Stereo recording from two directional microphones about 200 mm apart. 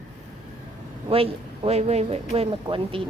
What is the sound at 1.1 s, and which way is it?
Speech, 30° right (ahead or behind).